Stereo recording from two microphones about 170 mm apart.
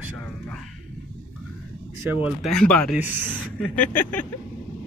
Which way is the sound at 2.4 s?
5° left (ahead or behind).